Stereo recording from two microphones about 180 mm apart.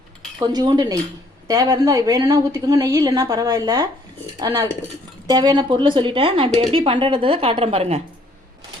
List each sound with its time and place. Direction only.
0.3 s a woman's voice: 20° right (ahead or behind)